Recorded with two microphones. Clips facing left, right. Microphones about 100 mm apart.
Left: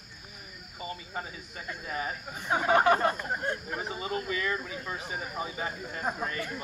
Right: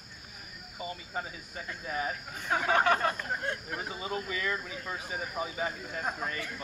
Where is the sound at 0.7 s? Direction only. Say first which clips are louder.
Even; 5° right (ahead or behind).